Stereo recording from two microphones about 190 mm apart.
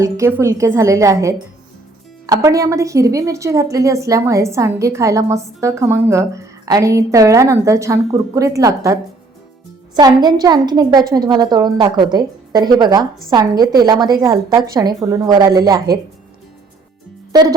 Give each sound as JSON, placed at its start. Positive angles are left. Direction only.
{"t": 0.0, "sound": "a woman's voice", "side_deg": -15}